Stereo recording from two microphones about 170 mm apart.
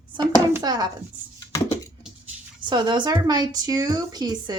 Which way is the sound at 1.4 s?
20° left (ahead or behind).